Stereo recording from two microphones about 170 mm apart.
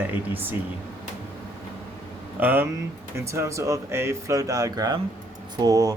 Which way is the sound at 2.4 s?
10° right (ahead or behind).